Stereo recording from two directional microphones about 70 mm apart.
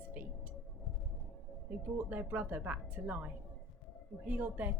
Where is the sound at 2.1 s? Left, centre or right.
Right.